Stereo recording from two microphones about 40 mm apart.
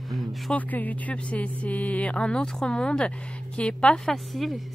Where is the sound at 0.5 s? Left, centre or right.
Left.